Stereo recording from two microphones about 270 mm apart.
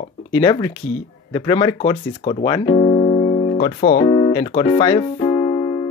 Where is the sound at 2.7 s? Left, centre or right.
Left.